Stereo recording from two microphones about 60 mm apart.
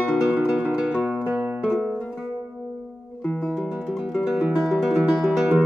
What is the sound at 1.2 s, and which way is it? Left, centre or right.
Music, right.